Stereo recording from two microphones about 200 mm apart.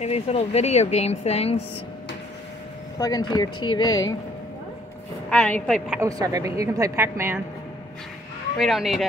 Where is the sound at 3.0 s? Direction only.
20° left (ahead or behind).